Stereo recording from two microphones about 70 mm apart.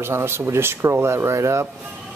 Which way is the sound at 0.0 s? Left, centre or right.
Right.